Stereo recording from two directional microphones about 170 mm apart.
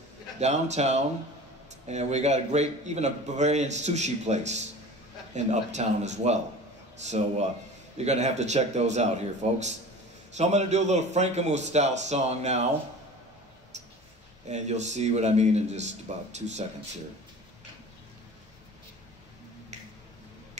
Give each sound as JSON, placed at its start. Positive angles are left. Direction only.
{"t": 0.4, "sound": "a man's voice", "side_deg": -40}
{"t": 14.5, "sound": "a man's voice", "side_deg": -40}